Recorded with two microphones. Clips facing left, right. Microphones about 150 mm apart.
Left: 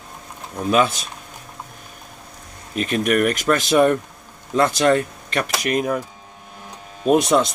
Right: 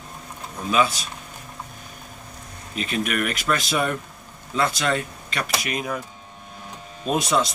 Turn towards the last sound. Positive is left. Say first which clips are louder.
# left 6 dB
turn(degrees=50)  # may be behind; listen again after turning